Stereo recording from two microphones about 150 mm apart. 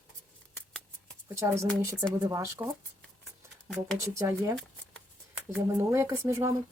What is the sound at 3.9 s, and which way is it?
Speech, 20° right (ahead or behind).